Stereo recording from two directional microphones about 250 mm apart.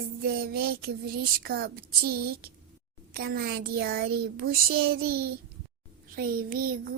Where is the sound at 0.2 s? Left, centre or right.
Right.